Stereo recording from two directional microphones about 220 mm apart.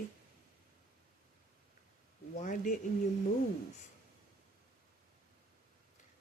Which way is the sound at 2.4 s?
35° left (ahead or behind).